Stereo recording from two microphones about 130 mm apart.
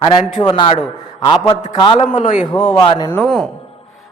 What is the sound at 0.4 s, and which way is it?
Speech, 35° left (ahead or behind).